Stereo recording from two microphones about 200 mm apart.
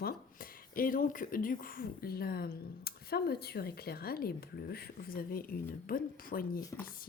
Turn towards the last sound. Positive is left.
turn(degrees=45)  # may be behind; listen again after turning